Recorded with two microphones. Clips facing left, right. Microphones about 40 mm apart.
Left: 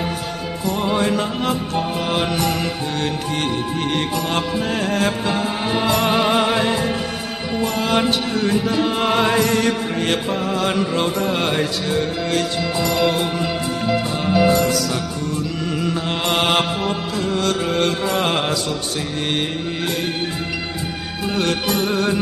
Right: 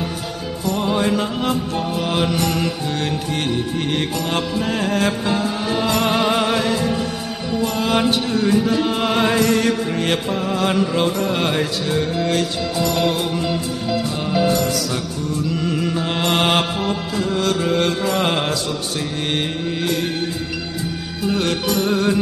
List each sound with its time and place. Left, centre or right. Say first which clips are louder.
0.7 s music: even; centre
5.4 s music: even; centre
5.9 s music: left 1 dB; centre
6.6 s music: even; centre
7.6 s music: even; centre
15.7 s music: right 1 dB; centre
21.8 s music: right 3 dB; centre